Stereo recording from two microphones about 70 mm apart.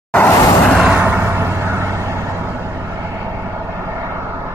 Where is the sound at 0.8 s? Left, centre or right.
Right.